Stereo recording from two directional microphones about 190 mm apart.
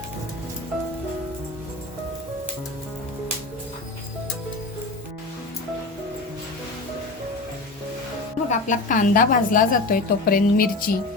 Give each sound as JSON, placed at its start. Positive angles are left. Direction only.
{"t": 8.4, "sound": "a woman's voice", "side_deg": 40}